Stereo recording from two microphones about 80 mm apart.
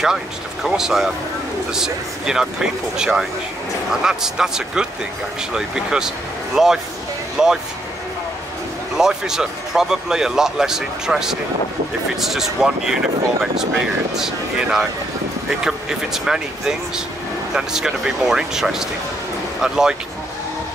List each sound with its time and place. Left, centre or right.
0.7 s speech: centre
8.9 s speech: centre